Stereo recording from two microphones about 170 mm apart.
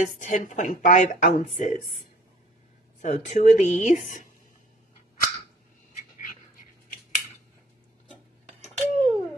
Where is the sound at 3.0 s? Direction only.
45° left (ahead or behind).